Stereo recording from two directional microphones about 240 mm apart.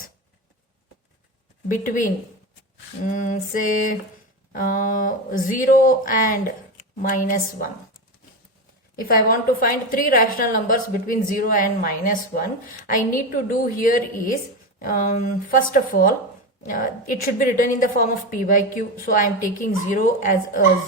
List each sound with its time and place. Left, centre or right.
1.6 s a woman's voice: left
9.3 s a woman's voice: left